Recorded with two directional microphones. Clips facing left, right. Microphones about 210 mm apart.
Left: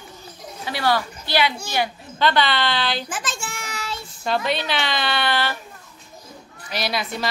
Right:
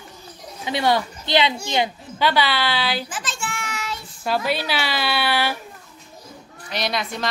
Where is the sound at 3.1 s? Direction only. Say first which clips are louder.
Even; 45° left (ahead or behind).